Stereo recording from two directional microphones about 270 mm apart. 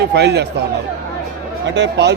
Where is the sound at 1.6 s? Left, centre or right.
Right.